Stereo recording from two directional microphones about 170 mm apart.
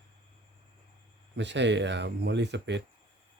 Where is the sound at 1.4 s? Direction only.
90° right.